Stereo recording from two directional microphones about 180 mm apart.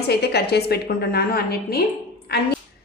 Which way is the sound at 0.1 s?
65° left (ahead or behind).